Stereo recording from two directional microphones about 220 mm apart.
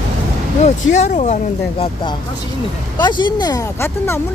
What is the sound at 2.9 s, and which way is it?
Speech, 20° left (ahead or behind).